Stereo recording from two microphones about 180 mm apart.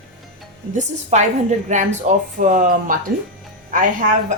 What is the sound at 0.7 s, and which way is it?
A woman's voice, 40° right (ahead or behind).